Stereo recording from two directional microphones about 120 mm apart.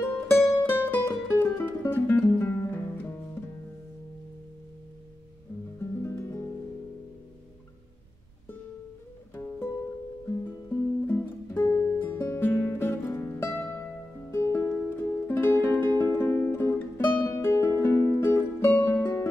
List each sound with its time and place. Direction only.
0.0 s music: 20° left (ahead or behind)
5.8 s music: 25° left (ahead or behind)
9.3 s music: 20° left (ahead or behind)